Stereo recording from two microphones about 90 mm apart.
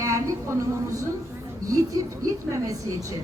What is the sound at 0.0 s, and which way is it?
A woman's voice, 35° right (ahead or behind).